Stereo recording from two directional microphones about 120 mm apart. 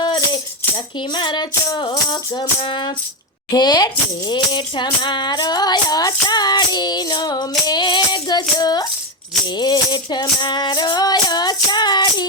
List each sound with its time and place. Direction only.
0.9 s speech: 40° left (ahead or behind)